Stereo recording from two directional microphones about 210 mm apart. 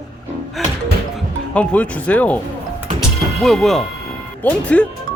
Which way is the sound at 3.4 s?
Centre (ahead or behind).